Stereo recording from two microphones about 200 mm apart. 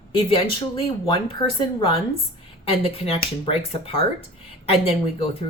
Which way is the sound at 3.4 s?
30° left (ahead or behind).